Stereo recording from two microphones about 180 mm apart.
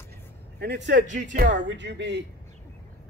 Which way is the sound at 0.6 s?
70° right (ahead or behind).